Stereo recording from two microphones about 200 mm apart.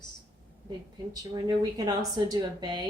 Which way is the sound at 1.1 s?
20° right (ahead or behind).